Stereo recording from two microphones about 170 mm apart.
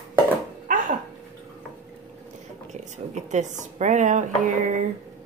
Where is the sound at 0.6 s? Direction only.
50° right (ahead or behind).